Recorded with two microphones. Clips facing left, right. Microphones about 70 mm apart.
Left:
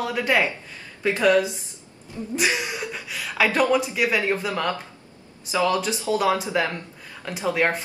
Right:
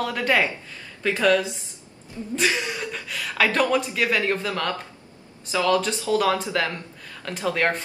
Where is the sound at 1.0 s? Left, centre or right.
Centre.